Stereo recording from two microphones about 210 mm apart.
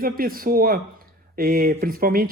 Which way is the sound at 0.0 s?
45° right (ahead or behind).